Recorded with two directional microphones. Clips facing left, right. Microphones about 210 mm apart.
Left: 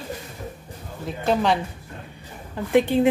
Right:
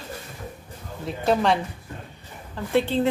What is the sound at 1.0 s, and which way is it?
Speech, centre (ahead or behind).